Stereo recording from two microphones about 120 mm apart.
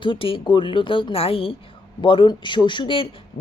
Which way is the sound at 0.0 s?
45° left (ahead or behind).